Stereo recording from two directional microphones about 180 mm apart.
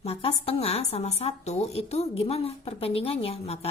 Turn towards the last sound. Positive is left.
turn(degrees=35)  # may be behind; listen again after turning